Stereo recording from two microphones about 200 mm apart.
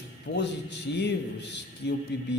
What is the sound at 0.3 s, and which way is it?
A man's voice, 60° left (ahead or behind).